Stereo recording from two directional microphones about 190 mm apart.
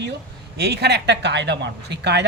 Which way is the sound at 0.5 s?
60° right (ahead or behind).